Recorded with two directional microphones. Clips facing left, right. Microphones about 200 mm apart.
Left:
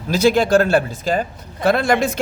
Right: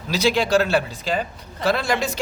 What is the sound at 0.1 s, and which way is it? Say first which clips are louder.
Speech: left 5 dB; 50° left (ahead or behind).